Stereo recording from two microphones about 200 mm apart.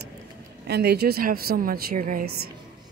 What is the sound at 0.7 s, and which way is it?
A woman's voice, 55° right (ahead or behind).